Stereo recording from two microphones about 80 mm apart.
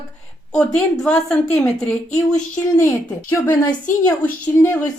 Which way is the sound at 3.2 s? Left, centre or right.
Left.